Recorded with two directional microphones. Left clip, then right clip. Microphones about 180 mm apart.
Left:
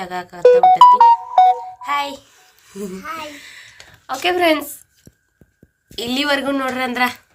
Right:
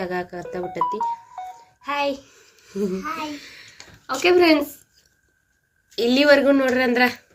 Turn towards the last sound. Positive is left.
turn(degrees=0)  # may be behind; listen again after turning